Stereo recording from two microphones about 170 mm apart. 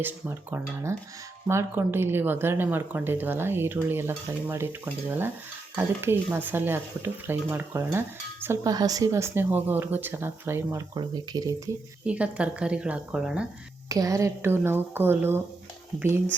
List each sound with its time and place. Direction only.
0.0 s speech: 15° right (ahead or behind)
12.0 s speech: 5° right (ahead or behind)
13.8 s speech: 20° right (ahead or behind)